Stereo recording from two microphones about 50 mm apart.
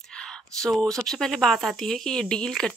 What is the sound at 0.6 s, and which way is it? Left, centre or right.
Speech, centre.